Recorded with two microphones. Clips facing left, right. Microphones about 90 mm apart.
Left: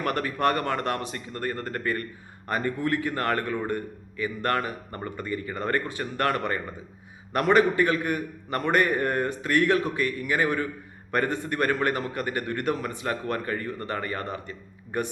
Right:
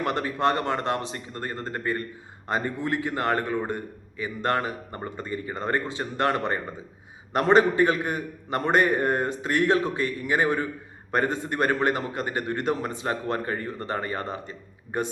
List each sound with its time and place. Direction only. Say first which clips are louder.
0.0 s a man's voice: right 1 dB; 25° right (ahead or behind)